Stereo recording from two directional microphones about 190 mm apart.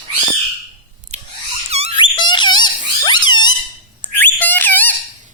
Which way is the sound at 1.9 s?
25° left (ahead or behind).